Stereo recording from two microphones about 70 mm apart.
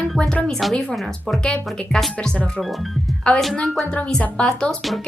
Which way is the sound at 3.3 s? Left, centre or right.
Centre.